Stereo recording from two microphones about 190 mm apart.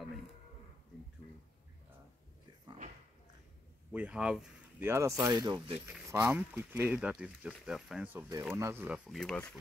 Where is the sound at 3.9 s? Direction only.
5° right (ahead or behind).